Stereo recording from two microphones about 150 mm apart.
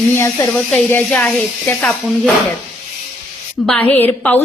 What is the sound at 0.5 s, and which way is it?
Speech, 10° left (ahead or behind).